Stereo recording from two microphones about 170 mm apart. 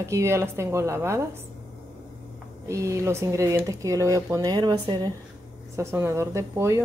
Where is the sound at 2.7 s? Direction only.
15° right (ahead or behind).